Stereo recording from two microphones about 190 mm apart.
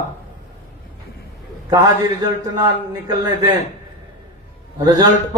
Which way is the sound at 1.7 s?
20° right (ahead or behind).